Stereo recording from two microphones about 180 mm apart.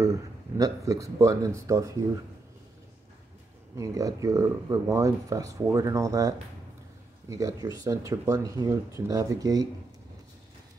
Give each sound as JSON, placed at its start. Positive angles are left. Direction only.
{"t": 0.0, "sound": "speech", "side_deg": -20}
{"t": 3.7, "sound": "speech", "side_deg": -20}